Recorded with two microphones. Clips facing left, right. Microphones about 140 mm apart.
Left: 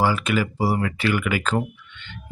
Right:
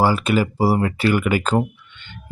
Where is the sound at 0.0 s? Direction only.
35° right (ahead or behind).